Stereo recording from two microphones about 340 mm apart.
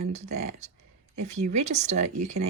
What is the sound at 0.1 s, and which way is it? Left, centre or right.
Speech, centre.